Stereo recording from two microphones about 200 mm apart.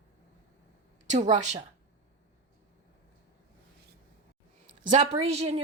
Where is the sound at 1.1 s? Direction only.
35° right (ahead or behind).